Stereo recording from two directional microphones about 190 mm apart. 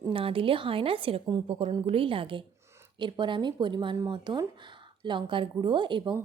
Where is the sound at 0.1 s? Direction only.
30° right (ahead or behind).